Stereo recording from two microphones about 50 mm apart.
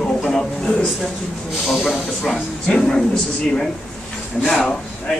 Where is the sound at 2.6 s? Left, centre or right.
Centre.